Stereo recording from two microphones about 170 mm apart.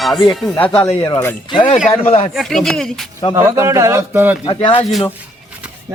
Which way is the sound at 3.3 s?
15° right (ahead or behind).